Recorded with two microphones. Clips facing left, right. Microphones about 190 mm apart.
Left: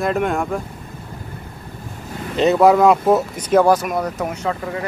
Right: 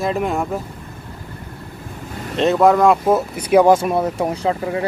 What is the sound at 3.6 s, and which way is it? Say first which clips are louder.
Speech: right 3 dB; 25° right (ahead or behind).